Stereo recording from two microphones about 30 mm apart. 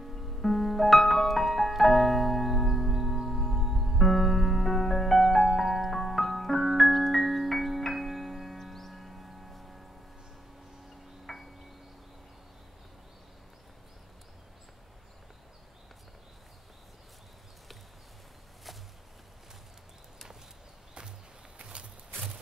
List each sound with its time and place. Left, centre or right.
0.0 s music: centre
5.2 s music: centre
11.2 s wind chime: centre
21.5 s walk: right